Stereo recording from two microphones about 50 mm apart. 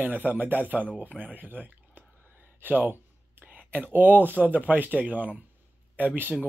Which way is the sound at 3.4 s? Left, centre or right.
Right.